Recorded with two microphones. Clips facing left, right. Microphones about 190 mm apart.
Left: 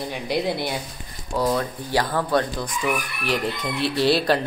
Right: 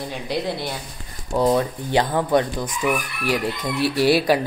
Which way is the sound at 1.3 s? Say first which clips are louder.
Right 4 dB; 20° right (ahead or behind).